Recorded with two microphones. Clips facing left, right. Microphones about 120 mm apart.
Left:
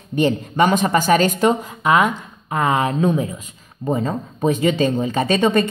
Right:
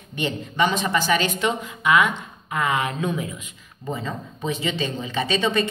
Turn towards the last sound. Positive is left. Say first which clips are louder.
# left 6 dB
turn(degrees=50)  # may be behind; listen again after turning